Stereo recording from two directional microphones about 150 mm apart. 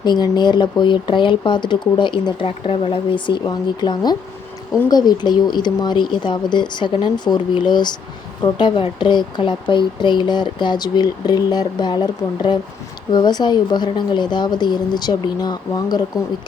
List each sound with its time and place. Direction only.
0.0 s speech: 30° left (ahead or behind)